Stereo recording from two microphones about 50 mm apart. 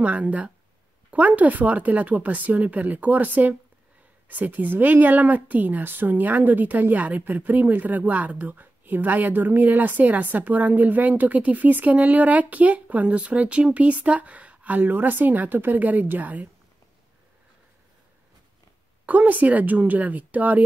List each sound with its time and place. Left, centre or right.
0.0 s speech: right
14.8 s speech: right
19.0 s speech: right